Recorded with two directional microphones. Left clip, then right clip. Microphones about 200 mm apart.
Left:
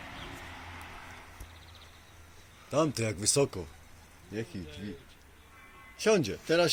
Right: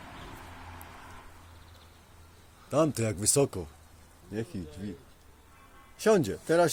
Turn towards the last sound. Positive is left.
turn(degrees=-40)  # may be behind; listen again after turning